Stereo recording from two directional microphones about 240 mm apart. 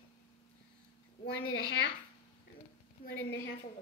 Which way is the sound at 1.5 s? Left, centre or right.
Left.